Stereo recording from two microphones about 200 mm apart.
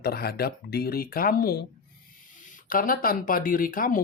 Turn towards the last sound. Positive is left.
turn(degrees=45)  # may be behind; listen again after turning